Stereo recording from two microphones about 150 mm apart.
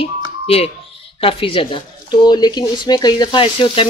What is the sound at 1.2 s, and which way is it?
Speech, 35° left (ahead or behind).